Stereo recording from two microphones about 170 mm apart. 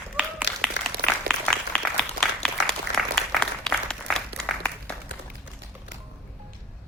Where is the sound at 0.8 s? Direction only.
90° left.